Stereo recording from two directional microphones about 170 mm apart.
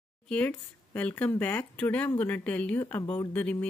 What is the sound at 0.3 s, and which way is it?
Speech, 10° left (ahead or behind).